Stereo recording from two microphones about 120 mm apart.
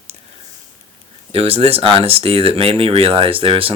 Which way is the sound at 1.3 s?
55° right (ahead or behind).